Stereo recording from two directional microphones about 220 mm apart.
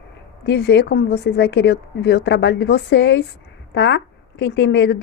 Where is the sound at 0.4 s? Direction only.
50° left (ahead or behind).